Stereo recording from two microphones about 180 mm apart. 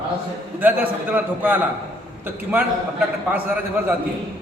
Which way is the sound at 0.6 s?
10° right (ahead or behind).